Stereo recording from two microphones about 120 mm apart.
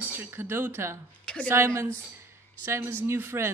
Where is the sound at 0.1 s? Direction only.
15° right (ahead or behind).